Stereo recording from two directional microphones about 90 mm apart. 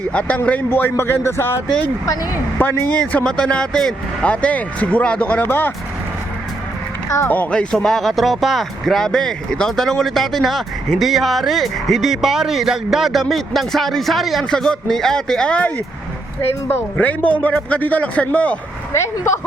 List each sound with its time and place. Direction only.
0.1 s a man's voice: 15° left (ahead or behind)
7.3 s speech: 15° left (ahead or behind)